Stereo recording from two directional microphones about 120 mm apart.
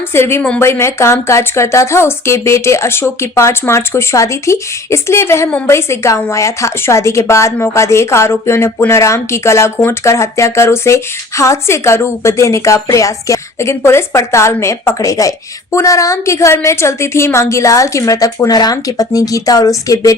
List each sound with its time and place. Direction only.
0.1 s a woman's voice: 20° left (ahead or behind)